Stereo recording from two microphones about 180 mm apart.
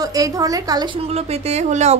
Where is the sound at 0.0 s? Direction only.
20° right (ahead or behind).